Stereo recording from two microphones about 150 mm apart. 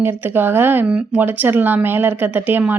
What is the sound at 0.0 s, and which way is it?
A woman's voice, 15° right (ahead or behind).